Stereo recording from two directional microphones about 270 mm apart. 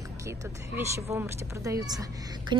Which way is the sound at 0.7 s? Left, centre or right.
Centre.